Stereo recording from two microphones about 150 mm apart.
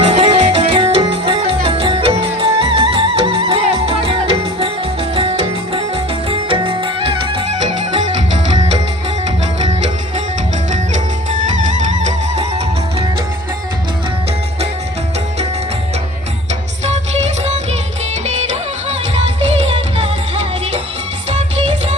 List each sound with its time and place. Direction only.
0.1 s music: 40° right (ahead or behind)
7.5 s music: 55° right (ahead or behind)
10.7 s music: 55° right (ahead or behind)
17.4 s music: 45° right (ahead or behind)